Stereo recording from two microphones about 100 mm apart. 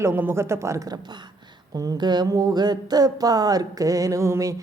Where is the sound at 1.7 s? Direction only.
40° right (ahead or behind).